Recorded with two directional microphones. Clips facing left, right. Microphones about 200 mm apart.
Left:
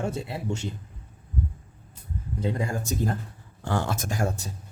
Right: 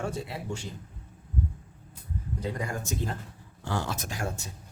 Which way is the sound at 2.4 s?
25° left (ahead or behind).